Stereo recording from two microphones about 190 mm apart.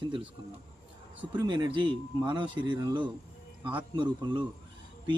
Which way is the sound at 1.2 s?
25° right (ahead or behind).